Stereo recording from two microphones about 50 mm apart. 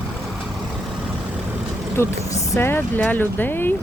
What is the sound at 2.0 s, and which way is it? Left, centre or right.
Vehicle, left.